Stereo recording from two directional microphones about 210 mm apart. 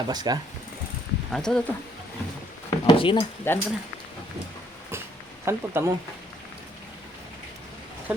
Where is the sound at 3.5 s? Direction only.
10° left (ahead or behind).